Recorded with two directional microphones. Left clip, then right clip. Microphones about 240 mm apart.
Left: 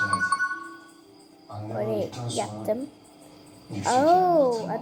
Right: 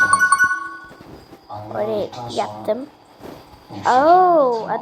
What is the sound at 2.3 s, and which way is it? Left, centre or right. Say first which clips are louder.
Speech: right 6 dB; centre.